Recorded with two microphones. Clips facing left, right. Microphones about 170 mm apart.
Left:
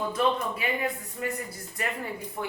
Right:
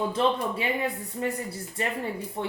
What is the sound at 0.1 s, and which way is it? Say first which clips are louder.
Speech: right 1 dB; 30° right (ahead or behind).